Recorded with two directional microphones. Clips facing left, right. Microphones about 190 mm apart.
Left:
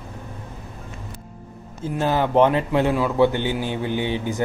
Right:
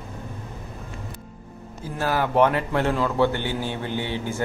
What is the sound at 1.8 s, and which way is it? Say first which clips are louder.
A man's voice: left 3 dB; 20° left (ahead or behind).